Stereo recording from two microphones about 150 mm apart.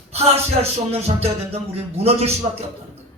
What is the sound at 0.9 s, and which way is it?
A man's voice, 45° right (ahead or behind).